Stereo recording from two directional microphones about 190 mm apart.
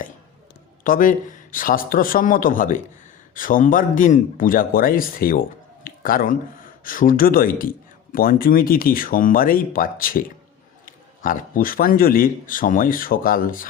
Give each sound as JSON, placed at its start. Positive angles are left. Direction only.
{"t": 0.9, "sound": "a man's voice", "side_deg": 45}